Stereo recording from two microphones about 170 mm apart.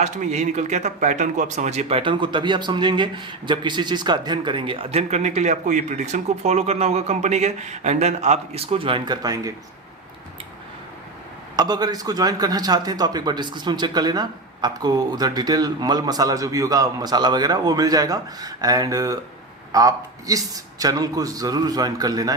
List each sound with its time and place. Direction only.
0.0 s speech: 45° right (ahead or behind); by 9.5 s 20° right (ahead or behind)
11.5 s a man's voice: 25° right (ahead or behind)